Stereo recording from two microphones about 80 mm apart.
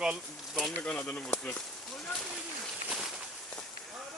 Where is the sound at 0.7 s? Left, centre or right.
Left.